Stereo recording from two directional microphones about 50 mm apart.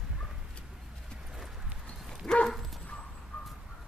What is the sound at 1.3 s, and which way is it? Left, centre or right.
Clip-clop, centre.